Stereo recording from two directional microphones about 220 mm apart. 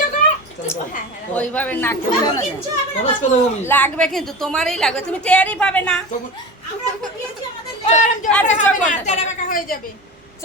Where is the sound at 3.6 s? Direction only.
5° left (ahead or behind).